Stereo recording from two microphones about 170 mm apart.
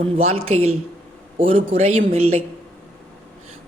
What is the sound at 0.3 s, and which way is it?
Speech, 35° right (ahead or behind).